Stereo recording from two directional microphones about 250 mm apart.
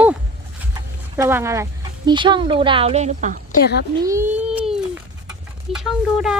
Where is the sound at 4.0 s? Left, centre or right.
Centre.